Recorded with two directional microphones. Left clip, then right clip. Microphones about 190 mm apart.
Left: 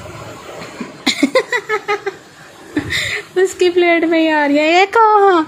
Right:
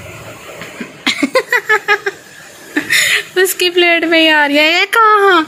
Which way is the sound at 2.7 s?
5° left (ahead or behind).